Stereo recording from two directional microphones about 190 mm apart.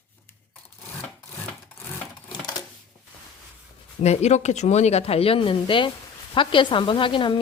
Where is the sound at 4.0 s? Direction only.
35° left (ahead or behind).